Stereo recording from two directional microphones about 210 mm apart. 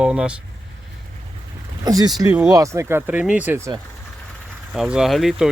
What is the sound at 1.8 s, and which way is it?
Speech, 20° right (ahead or behind).